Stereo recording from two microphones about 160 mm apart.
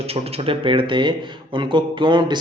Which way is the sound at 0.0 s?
40° right (ahead or behind).